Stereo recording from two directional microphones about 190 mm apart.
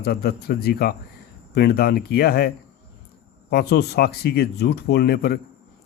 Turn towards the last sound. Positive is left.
turn(degrees=55)  # may be behind; listen again after turning